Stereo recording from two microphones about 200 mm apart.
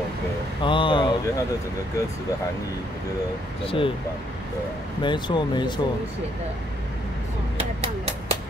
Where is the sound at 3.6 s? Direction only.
25° left (ahead or behind).